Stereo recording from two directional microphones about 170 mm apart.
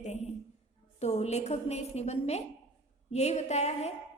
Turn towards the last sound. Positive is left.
turn(degrees=40)  # may be behind; listen again after turning